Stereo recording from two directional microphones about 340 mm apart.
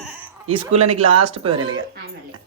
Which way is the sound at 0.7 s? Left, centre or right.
Centre.